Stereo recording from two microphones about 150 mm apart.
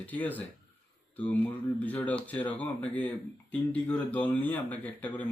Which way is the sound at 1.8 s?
10° left (ahead or behind).